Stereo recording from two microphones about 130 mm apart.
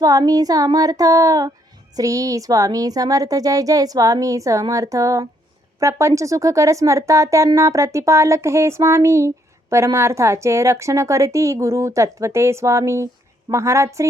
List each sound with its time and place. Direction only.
0.0 s speech: 30° right (ahead or behind)